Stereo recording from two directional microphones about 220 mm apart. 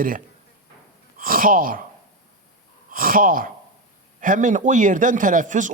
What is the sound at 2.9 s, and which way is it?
A woman's voice, 40° right (ahead or behind).